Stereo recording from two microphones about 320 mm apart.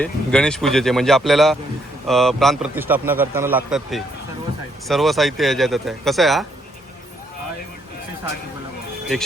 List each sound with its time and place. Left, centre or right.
0.0 s speech: centre